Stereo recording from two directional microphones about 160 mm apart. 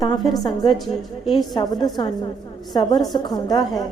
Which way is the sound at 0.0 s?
25° left (ahead or behind).